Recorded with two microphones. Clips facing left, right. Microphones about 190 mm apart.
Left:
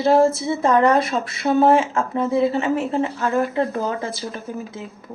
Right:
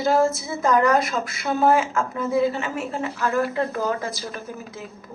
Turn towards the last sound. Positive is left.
turn(degrees=25)  # may be behind; listen again after turning